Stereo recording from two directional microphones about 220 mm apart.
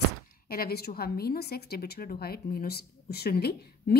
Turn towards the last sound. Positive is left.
turn(degrees=45)  # may be behind; listen again after turning